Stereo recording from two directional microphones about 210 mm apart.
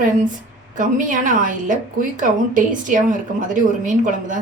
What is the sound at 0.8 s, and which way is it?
A woman's voice, 40° right (ahead or behind).